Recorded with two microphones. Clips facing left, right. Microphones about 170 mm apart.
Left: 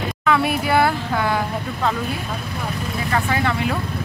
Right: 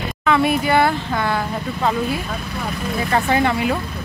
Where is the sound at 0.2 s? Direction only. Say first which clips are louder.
Right 3 dB; 5° left (ahead or behind).